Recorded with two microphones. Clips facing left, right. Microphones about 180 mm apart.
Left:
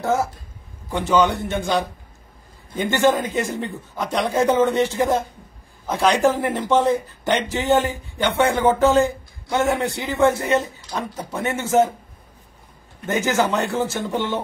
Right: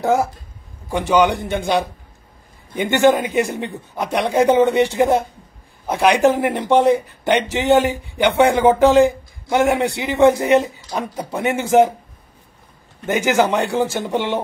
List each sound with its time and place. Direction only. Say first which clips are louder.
0.0 s a man's voice: right 4 dB; 15° right (ahead or behind)
7.4 s speech: right 4 dB; 80° right
7.7 s speech: right 4 dB; 15° right (ahead or behind)
13.0 s speech: right 3 dB; 10° right (ahead or behind)